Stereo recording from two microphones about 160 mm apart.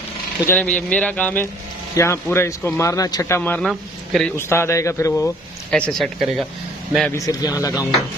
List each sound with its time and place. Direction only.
0.5 s speech: 10° left (ahead or behind)
4.4 s speech: 15° left (ahead or behind)
5.7 s speech: 5° left (ahead or behind)
7.1 s speech: 20° left (ahead or behind)